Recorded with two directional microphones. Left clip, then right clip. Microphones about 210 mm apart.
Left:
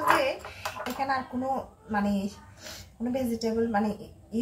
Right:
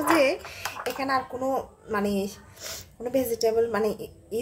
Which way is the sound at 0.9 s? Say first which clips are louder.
Right 2 dB; 60° right (ahead or behind).